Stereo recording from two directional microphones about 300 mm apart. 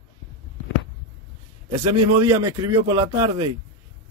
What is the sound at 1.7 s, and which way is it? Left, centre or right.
A man's voice, centre.